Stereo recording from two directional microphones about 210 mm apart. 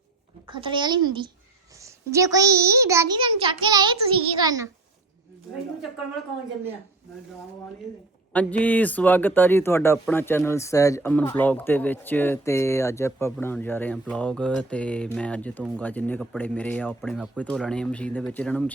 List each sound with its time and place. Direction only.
0.4 s a child's voice: 25° right (ahead or behind)
8.3 s speech: 5° left (ahead or behind)